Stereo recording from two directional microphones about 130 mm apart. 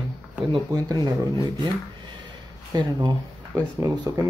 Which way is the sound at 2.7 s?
30° right (ahead or behind).